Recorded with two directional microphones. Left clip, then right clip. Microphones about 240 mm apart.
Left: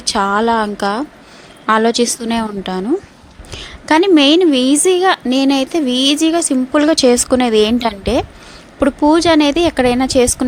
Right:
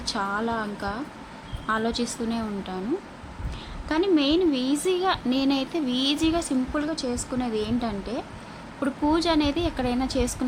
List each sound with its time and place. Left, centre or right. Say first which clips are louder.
0.0 s a woman's voice: left 13 dB; left